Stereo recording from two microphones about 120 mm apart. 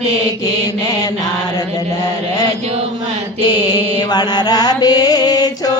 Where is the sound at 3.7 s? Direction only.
35° left (ahead or behind).